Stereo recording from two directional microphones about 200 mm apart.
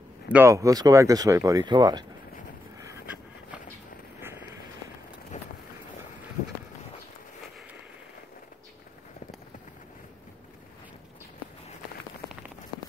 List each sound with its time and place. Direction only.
0.3 s speech: 15° right (ahead or behind)
5.3 s vehicle: 35° left (ahead or behind)